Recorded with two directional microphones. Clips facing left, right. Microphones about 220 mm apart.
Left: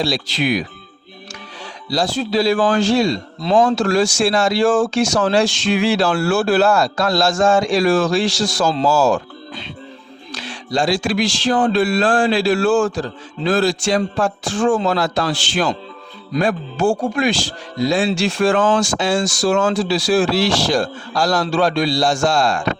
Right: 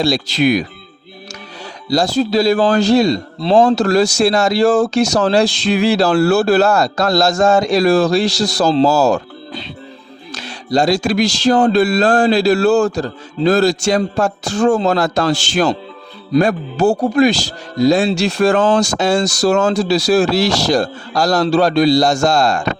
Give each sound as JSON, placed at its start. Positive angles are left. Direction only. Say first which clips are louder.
{"t": 0.0, "sound": "speech", "louder": "right 5 dB", "side_deg": -45}
{"t": 1.9, "sound": "speech", "louder": "right 5 dB", "side_deg": -40}